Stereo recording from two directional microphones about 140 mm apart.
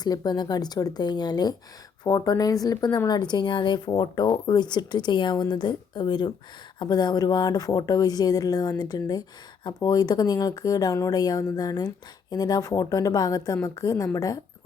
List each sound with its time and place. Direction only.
0.0 s a woman's voice: 30° left (ahead or behind)